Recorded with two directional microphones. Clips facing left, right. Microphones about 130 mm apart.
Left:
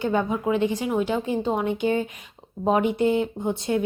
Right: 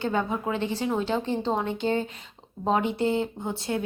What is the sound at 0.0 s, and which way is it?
A woman's voice, 15° left (ahead or behind).